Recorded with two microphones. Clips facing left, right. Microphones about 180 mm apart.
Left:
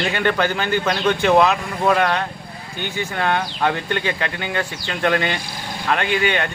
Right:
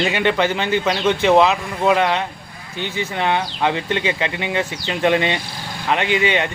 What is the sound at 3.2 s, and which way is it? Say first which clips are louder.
Speech: right 1 dB; 5° right (ahead or behind).